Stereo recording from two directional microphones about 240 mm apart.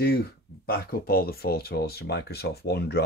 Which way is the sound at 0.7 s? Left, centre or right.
Left.